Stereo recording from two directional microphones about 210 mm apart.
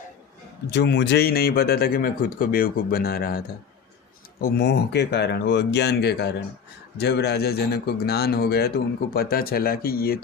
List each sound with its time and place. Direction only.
0.7 s speech: 55° left (ahead or behind)